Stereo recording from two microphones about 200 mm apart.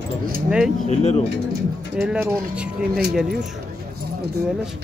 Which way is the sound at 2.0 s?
5° right (ahead or behind).